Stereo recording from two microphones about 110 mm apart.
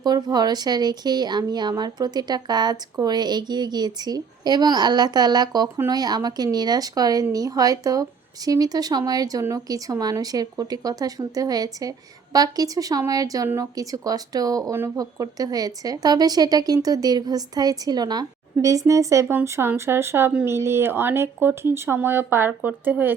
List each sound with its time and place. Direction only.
0.0 s speech: 40° right (ahead or behind); by 23.1 s 15° right (ahead or behind)